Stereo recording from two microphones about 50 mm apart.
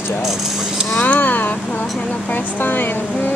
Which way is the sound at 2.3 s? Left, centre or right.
Left.